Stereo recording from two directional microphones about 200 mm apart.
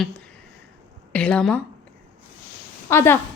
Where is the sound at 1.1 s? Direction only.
5° left (ahead or behind).